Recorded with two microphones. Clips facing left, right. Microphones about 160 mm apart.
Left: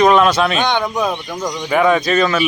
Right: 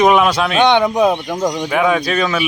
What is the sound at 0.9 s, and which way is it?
Speech, 25° right (ahead or behind).